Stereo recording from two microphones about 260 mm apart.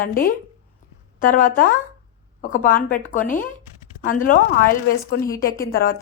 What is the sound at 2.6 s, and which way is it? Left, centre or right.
A woman's voice, left.